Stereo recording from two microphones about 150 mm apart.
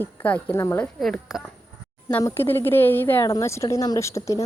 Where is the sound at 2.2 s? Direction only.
15° left (ahead or behind).